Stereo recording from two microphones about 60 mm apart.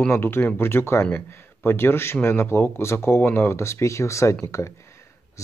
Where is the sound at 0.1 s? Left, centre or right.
Left.